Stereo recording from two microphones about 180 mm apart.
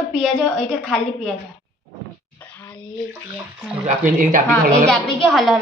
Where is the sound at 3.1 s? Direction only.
5° right (ahead or behind).